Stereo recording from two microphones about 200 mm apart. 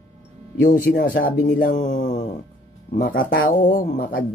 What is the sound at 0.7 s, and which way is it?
Speech, 45° left (ahead or behind).